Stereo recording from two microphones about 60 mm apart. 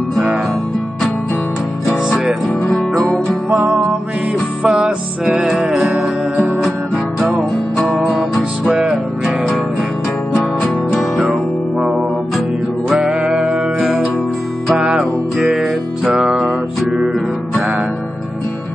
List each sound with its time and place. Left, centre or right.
3.5 s music: right
4.6 s music: centre
7.7 s guitar: centre
8.0 s music: centre
9.2 s music: centre
13.0 s music: centre